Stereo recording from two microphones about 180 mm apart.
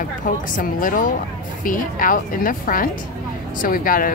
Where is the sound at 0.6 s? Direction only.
50° left (ahead or behind).